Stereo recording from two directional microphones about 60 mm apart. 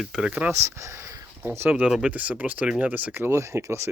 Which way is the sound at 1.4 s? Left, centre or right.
Right.